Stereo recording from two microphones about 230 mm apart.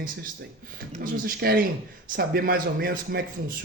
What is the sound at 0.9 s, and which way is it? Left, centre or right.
A man's voice, right.